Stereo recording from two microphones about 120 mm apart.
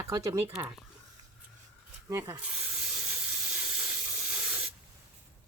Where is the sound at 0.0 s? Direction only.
25° right (ahead or behind).